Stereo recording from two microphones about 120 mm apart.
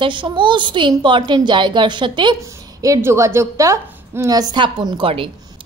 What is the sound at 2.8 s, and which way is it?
A woman's voice, 25° right (ahead or behind).